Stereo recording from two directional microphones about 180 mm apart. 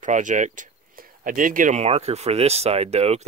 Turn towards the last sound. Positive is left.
turn(degrees=-35)  # may be behind; listen again after turning